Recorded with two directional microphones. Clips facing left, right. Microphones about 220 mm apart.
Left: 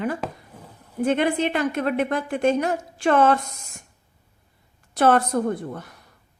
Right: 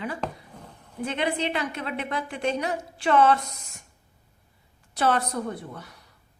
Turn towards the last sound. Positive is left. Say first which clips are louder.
# left 7 dB
turn(degrees=50)  # may be behind; listen again after turning